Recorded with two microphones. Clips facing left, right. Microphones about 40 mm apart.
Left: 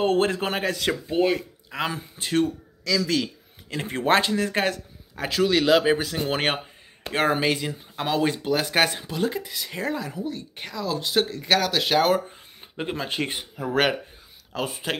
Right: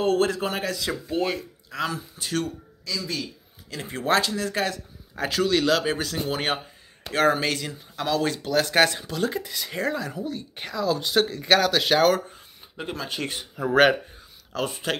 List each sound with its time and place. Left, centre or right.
0.0 s speech: left
1.2 s speech: left
2.8 s speech: left
3.7 s speech: left
5.1 s speech: centre
6.2 s speech: left
7.0 s speech: left; by 12.2 s centre
12.3 s speech: left
14.5 s speech: centre